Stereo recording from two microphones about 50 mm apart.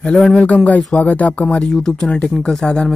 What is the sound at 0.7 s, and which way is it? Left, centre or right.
Speech, left.